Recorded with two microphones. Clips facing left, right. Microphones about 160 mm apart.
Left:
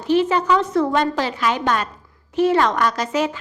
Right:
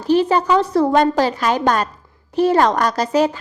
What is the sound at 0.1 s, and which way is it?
A woman's voice, 35° right (ahead or behind).